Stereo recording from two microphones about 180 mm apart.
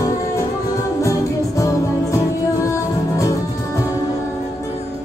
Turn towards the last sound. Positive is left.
turn(degrees=15)  # may be behind; listen again after turning